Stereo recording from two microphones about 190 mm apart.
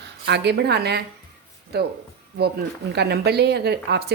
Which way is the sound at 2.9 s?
60° right (ahead or behind).